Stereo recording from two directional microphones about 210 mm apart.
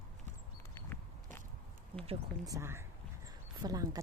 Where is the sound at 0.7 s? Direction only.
10° left (ahead or behind).